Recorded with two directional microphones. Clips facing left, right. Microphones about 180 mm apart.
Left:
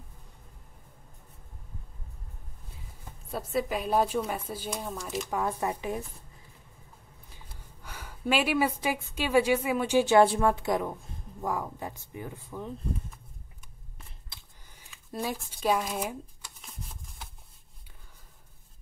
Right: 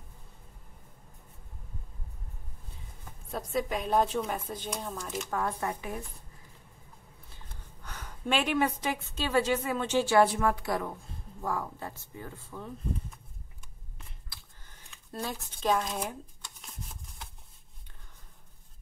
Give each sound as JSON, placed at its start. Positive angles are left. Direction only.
{"t": 3.3, "sound": "a woman's voice", "side_deg": 5}
{"t": 5.3, "sound": "speech", "side_deg": 20}
{"t": 7.3, "sound": "a woman's voice", "side_deg": 10}
{"t": 15.0, "sound": "speech", "side_deg": 10}
{"t": 15.6, "sound": "shuffling cards", "side_deg": 5}